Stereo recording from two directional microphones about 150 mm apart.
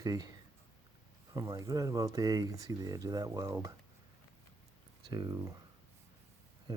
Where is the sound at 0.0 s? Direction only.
25° right (ahead or behind).